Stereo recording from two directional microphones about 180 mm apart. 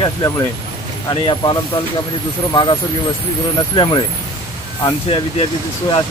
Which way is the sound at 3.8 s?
25° left (ahead or behind).